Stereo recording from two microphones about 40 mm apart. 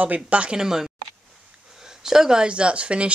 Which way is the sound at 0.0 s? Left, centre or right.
Right.